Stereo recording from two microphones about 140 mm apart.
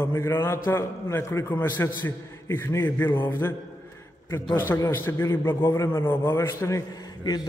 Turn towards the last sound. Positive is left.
turn(degrees=25)  # may be behind; listen again after turning